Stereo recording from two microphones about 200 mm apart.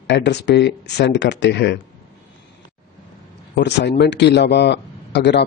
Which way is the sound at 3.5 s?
60° left (ahead or behind).